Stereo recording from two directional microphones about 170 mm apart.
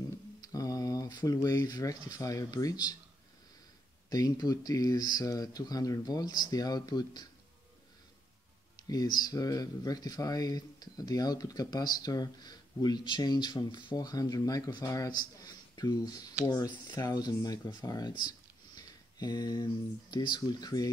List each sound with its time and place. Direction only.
0.4 s speech: 20° left (ahead or behind)
4.1 s speech: 20° left (ahead or behind)
8.7 s speech: 20° left (ahead or behind)